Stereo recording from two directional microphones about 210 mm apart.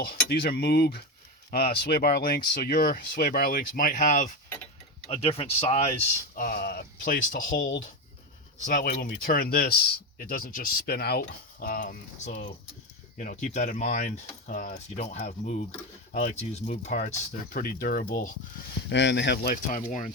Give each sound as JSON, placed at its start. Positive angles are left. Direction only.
{"t": 0.0, "sound": "speech", "side_deg": 45}
{"t": 6.3, "sound": "speech", "side_deg": 40}
{"t": 7.6, "sound": "speech", "side_deg": 65}
{"t": 8.5, "sound": "speech", "side_deg": 40}
{"t": 18.9, "sound": "speech", "side_deg": 55}